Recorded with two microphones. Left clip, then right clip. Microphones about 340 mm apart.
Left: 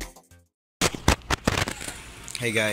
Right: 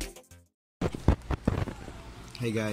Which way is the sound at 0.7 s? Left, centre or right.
Left.